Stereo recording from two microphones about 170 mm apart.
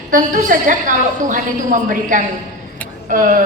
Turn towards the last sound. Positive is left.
turn(degrees=-50)  # may be behind; listen again after turning